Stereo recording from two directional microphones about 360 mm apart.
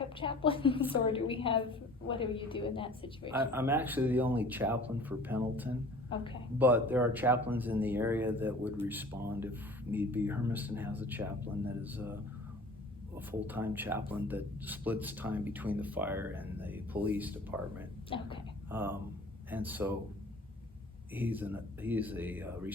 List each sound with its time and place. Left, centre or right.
0.2 s a woman's voice: centre
3.3 s speech: centre
6.1 s a woman's voice: centre
6.6 s speech: centre
13.1 s speech: centre
18.1 s a woman's voice: centre
18.7 s speech: centre
21.1 s speech: centre